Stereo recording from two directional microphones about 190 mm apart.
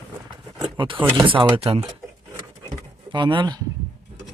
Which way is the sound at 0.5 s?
25° right (ahead or behind).